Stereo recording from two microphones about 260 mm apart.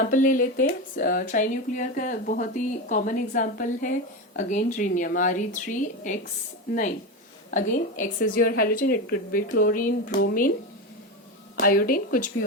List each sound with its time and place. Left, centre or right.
0.0 s speech: left
7.5 s speech: left
11.5 s speech: left